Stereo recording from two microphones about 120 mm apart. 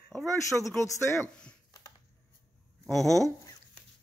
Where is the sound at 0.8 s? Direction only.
25° left (ahead or behind).